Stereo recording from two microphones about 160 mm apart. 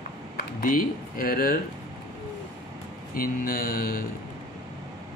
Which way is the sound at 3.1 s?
65° left (ahead or behind).